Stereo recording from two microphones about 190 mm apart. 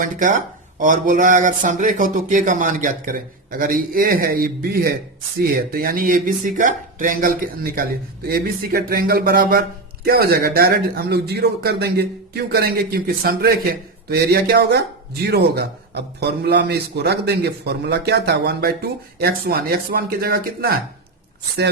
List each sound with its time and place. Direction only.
0.0 s a man's voice: 45° right (ahead or behind)